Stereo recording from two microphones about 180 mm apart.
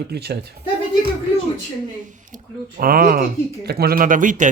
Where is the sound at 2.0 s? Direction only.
45° right (ahead or behind).